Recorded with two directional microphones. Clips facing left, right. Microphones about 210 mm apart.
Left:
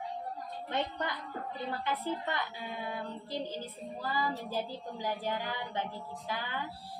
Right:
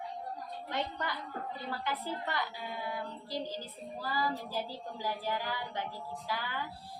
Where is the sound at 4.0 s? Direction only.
15° left (ahead or behind).